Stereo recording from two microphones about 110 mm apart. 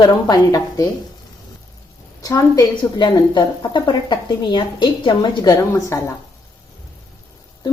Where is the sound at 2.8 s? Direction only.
45° left (ahead or behind).